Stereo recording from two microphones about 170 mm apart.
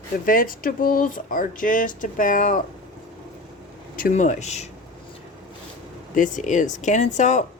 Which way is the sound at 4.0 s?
50° left (ahead or behind).